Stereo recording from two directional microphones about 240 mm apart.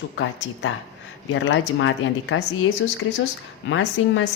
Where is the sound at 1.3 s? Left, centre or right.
Left.